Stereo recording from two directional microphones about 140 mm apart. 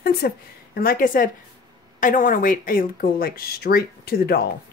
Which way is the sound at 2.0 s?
70° left (ahead or behind).